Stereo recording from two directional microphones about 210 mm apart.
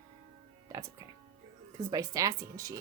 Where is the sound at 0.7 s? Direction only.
15° right (ahead or behind).